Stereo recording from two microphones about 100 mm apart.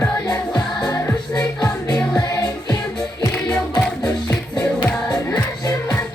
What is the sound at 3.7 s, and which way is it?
Music, 40° left (ahead or behind).